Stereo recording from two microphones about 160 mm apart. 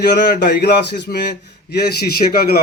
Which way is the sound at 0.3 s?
85° left.